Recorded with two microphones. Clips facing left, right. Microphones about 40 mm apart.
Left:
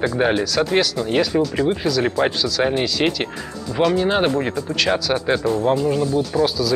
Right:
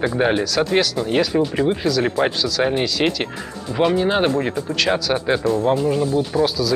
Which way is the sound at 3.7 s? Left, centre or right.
Right.